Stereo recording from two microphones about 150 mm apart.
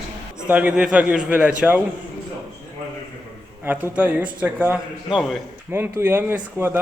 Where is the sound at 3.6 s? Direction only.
15° right (ahead or behind).